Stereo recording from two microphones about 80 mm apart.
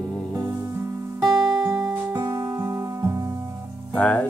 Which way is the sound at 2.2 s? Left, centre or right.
Right.